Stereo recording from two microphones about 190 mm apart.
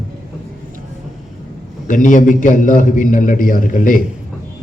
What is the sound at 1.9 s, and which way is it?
A man's voice, 45° left (ahead or behind).